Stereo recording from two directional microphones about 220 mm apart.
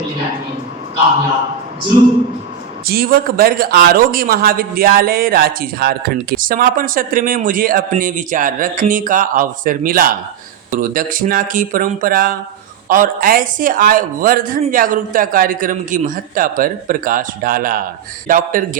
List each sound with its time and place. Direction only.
2.8 s speech: 40° right (ahead or behind)